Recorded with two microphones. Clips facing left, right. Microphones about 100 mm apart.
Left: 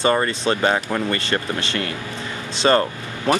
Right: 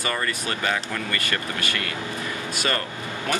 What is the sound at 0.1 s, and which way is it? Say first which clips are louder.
Speech: left 8 dB; 35° left (ahead or behind).